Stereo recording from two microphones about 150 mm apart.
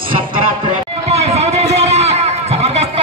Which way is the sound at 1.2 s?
45° right (ahead or behind).